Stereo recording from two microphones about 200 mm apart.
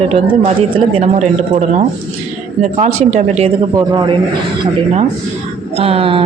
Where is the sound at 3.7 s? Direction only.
20° right (ahead or behind).